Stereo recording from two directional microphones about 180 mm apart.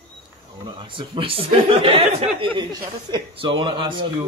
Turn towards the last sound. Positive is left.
turn(degrees=-25)  # may be behind; listen again after turning